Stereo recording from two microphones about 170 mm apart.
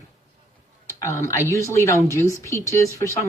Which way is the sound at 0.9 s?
15° left (ahead or behind).